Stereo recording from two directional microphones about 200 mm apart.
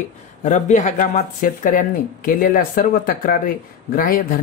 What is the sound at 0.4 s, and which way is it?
Speech, 35° left (ahead or behind).